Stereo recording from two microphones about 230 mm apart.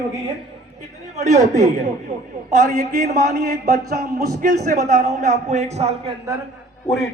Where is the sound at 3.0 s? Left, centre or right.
Right.